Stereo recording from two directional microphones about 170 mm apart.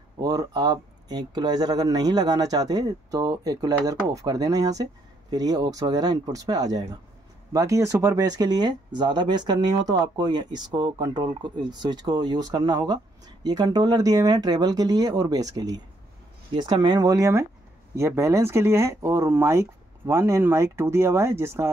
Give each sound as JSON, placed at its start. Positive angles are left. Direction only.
{"t": 0.2, "sound": "speech", "side_deg": -20}